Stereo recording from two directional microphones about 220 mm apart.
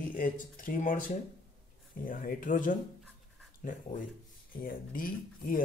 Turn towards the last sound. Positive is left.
turn(degrees=40)  # may be behind; listen again after turning